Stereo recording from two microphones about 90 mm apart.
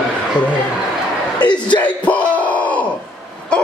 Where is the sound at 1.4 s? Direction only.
55° left (ahead or behind).